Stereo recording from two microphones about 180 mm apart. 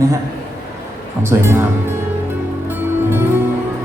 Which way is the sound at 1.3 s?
15° right (ahead or behind).